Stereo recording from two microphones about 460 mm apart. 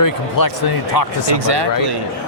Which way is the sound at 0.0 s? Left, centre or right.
Left.